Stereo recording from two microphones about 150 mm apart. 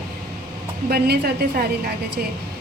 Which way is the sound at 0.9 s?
90° right.